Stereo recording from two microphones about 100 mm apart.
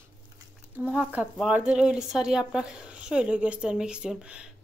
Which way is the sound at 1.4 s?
10° right (ahead or behind).